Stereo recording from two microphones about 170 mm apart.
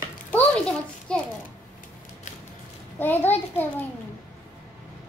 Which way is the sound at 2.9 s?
10° left (ahead or behind).